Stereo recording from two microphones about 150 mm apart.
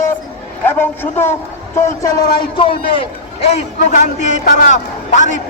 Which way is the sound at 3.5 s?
50° left (ahead or behind).